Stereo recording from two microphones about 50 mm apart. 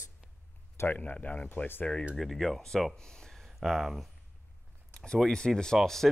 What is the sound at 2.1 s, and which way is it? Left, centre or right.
Speech, centre.